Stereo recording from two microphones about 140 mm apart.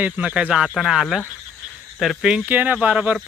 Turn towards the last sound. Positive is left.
turn(degrees=-10)  # may be behind; listen again after turning